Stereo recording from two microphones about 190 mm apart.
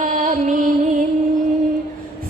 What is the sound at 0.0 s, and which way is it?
Music, 45° right (ahead or behind).